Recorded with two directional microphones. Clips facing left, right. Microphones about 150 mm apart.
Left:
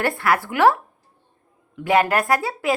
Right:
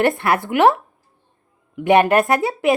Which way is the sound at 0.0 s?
20° right (ahead or behind).